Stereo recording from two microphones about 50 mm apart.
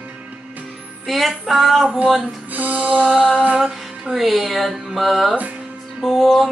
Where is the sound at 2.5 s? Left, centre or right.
Right.